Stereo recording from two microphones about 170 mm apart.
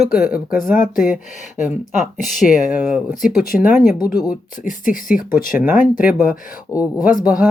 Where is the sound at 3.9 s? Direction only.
20° left (ahead or behind).